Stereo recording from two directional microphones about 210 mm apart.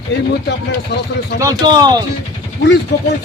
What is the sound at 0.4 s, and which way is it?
Speech, 55° left (ahead or behind).